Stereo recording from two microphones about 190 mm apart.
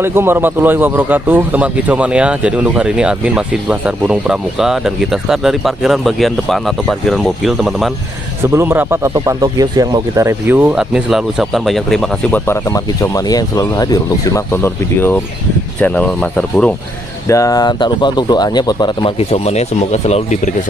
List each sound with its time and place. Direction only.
0.0 s a man's voice: 10° right (ahead or behind)
8.4 s speech: 15° right (ahead or behind); by 12.4 s centre (ahead or behind)
12.4 s a man's voice: 15° left (ahead or behind)
17.3 s speech: 15° left (ahead or behind); by 20.5 s 35° left (ahead or behind)